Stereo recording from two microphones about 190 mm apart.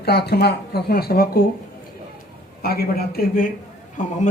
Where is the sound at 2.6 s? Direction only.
55° left (ahead or behind).